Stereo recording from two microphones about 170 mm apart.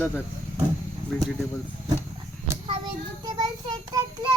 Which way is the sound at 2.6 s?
30° right (ahead or behind).